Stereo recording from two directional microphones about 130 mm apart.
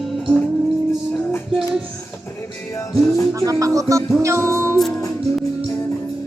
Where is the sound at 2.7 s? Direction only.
20° left (ahead or behind).